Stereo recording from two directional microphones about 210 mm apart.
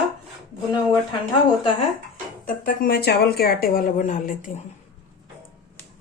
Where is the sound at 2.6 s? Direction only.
45° left (ahead or behind).